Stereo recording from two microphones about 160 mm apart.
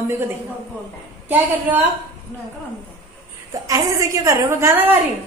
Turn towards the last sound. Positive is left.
turn(degrees=-15)  # may be behind; listen again after turning